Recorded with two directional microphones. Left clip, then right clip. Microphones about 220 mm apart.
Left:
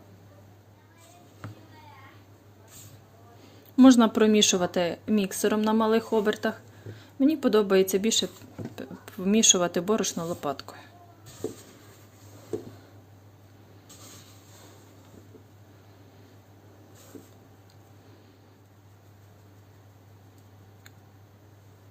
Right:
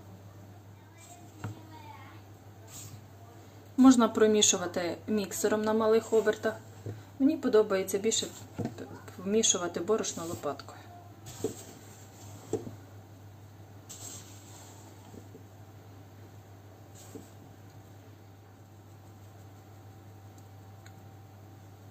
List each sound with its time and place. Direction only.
3.8 s speech: 35° left (ahead or behind)